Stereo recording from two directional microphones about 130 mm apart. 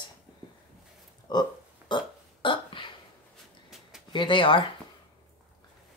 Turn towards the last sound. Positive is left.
turn(degrees=40)  # may be behind; listen again after turning